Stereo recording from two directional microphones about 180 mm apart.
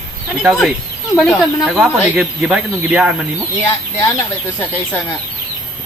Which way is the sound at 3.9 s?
15° left (ahead or behind).